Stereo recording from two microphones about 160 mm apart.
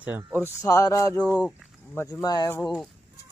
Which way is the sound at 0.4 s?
20° left (ahead or behind).